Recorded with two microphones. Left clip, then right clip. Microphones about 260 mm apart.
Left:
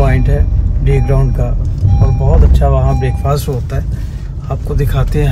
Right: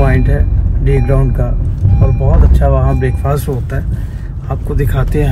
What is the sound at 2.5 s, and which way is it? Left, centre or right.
Speech, centre.